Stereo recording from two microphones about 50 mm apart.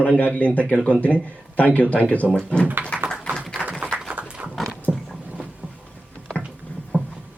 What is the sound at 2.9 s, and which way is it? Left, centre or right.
Tap, centre.